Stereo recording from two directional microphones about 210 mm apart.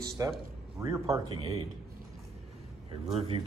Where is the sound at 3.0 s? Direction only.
30° right (ahead or behind).